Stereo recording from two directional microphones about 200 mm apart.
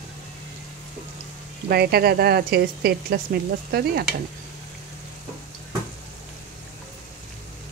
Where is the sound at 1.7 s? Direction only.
50° right (ahead or behind).